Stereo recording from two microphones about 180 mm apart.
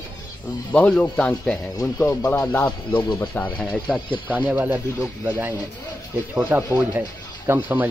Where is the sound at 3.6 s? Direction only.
5° left (ahead or behind).